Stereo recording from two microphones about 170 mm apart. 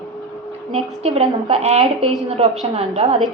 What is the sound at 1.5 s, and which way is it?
A woman's voice, 40° right (ahead or behind).